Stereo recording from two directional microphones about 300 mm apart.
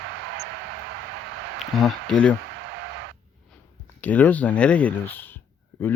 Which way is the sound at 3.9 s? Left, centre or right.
Centre.